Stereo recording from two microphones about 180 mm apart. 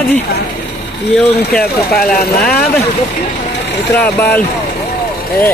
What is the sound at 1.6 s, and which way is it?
Speech, 55° left (ahead or behind).